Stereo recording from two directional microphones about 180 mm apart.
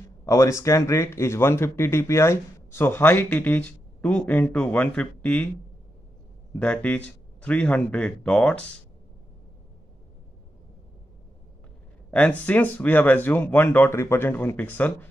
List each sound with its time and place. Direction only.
0.2 s speech: 15° left (ahead or behind)
6.6 s speech: 5° left (ahead or behind)
12.1 s speech: 10° left (ahead or behind)